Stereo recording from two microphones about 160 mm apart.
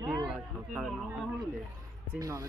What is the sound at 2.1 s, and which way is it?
Speech, 20° right (ahead or behind).